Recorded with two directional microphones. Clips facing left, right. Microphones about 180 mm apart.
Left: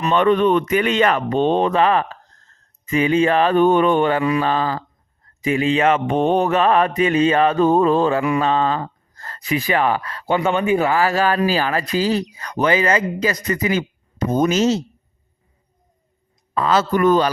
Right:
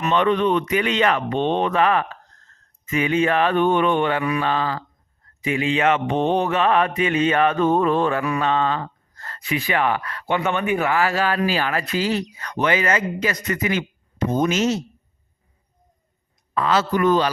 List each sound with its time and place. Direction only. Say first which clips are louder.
0.0 s speech: left 3 dB; 45° left (ahead or behind)
2.5 s mantra: left 4 dB; 30° left (ahead or behind)
16.6 s speech: left 2 dB; 40° left (ahead or behind)